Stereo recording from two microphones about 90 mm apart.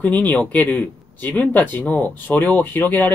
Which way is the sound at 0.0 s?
20° left (ahead or behind).